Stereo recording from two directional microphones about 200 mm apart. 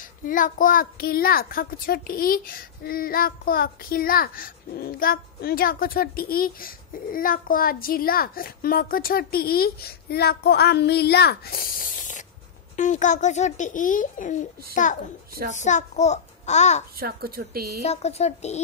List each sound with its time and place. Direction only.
0.2 s a child's voice: 40° left (ahead or behind)
17.0 s speech: 50° right (ahead or behind)
17.8 s a child's voice: 30° left (ahead or behind)